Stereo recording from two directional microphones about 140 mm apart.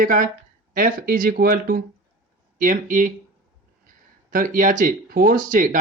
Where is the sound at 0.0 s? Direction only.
75° right (ahead or behind).